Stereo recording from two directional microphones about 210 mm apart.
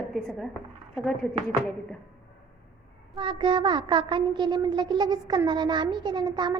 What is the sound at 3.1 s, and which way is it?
A woman's voice, 25° right (ahead or behind).